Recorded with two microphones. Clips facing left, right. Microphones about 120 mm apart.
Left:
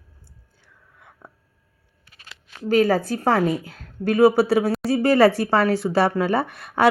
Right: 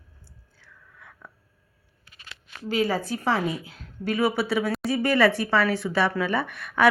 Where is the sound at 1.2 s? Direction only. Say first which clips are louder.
Left 3 dB; 25° left (ahead or behind).